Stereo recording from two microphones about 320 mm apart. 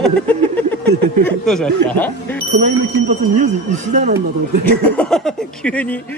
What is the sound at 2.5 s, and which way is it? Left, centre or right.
Speech, right.